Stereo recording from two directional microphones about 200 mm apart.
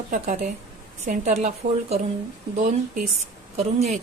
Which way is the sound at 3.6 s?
35° right (ahead or behind).